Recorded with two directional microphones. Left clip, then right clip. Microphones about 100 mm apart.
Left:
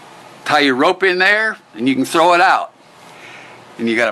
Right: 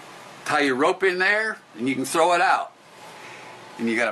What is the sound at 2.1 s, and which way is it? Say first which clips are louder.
Speech: left 7 dB; 40° left (ahead or behind).